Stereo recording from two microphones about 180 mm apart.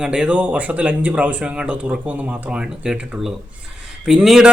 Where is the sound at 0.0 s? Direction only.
5° right (ahead or behind).